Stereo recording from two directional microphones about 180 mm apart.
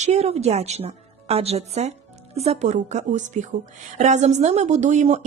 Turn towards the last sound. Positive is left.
turn(degrees=-40)  # may be behind; listen again after turning